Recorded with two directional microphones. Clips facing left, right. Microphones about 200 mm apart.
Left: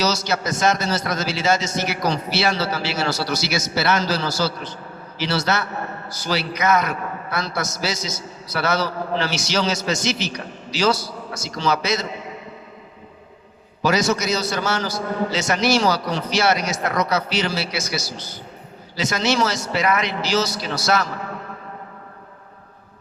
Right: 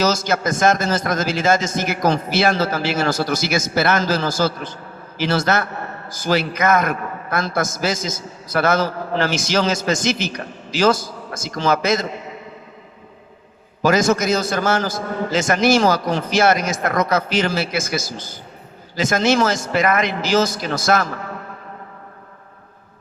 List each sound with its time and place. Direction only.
0.0 s a man's voice: 50° right (ahead or behind)
13.8 s a man's voice: 50° right (ahead or behind)